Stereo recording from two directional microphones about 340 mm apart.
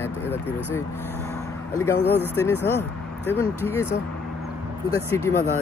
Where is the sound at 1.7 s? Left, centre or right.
Centre.